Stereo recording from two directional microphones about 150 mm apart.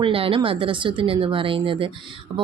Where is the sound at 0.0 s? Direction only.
35° right (ahead or behind).